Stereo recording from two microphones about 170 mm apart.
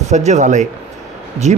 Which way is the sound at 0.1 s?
45° right (ahead or behind).